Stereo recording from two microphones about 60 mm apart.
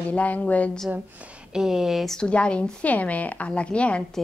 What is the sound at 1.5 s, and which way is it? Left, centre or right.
Speech, centre.